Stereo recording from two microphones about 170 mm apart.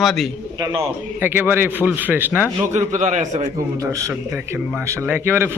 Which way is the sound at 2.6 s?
45° right (ahead or behind).